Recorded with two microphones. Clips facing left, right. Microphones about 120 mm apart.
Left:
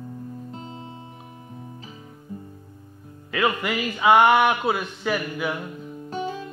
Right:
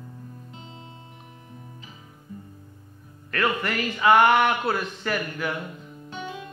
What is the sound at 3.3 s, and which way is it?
Speech, 10° left (ahead or behind).